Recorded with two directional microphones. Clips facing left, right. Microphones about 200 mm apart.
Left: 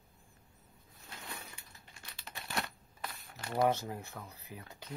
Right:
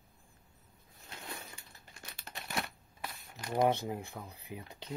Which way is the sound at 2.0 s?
45° right (ahead or behind).